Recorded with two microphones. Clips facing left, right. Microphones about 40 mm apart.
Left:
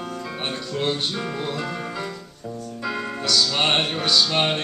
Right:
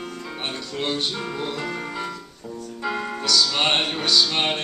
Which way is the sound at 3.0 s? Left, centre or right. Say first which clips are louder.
Even; centre.